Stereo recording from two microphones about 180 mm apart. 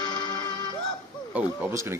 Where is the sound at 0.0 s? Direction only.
25° left (ahead or behind).